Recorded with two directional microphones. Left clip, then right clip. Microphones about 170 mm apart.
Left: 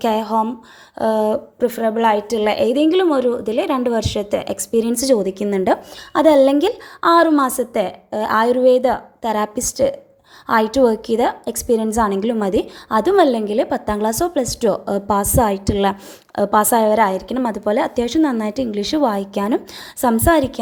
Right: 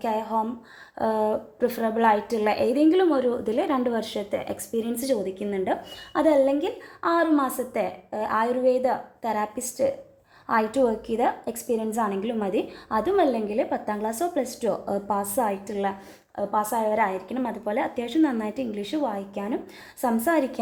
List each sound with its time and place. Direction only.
0.0 s speech: 30° left (ahead or behind)
0.9 s a woman's voice: 15° left (ahead or behind)
3.3 s a woman's voice: 15° left (ahead or behind); by 17.0 s 40° left (ahead or behind)
17.0 s speech: 25° left (ahead or behind)
20.0 s a woman's voice: 25° left (ahead or behind)